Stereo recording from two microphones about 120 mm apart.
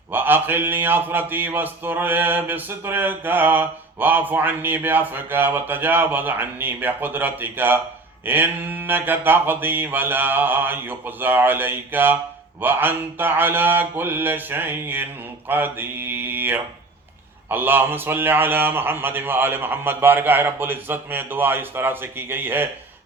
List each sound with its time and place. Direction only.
0.1 s speech: 15° right (ahead or behind)